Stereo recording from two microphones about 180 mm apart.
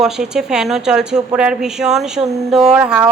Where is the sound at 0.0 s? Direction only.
5° right (ahead or behind).